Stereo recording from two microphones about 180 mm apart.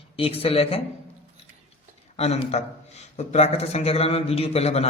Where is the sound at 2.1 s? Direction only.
35° left (ahead or behind).